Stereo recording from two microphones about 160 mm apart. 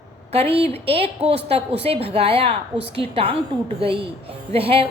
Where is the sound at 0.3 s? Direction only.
40° right (ahead or behind).